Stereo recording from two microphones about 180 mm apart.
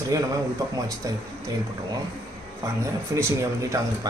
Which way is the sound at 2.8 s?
15° right (ahead or behind).